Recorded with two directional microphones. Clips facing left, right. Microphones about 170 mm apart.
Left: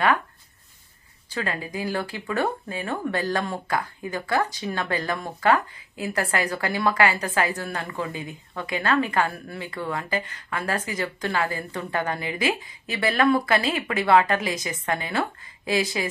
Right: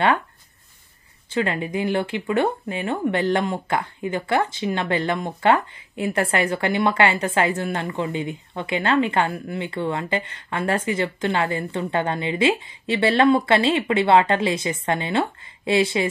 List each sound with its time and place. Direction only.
1.3 s speech: 25° right (ahead or behind)